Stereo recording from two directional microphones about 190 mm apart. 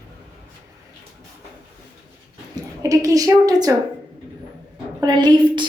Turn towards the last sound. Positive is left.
turn(degrees=-25)  # may be behind; listen again after turning